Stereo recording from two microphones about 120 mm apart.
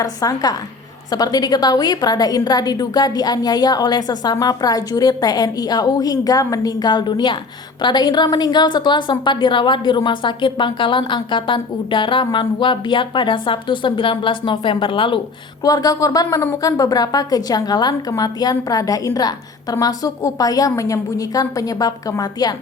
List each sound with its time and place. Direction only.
0.0 s a woman's voice: 30° left (ahead or behind)
15.6 s a woman's voice: 30° left (ahead or behind)